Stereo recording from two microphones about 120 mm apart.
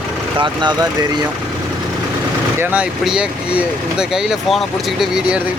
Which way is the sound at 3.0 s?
5° right (ahead or behind).